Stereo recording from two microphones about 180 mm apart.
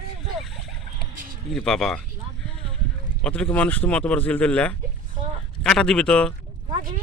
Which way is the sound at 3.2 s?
5° left (ahead or behind).